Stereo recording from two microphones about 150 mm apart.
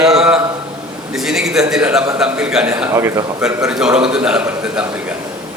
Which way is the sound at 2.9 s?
20° right (ahead or behind).